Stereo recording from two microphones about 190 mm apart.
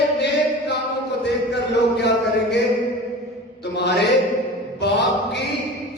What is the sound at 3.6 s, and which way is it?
Mantra, 65° left (ahead or behind).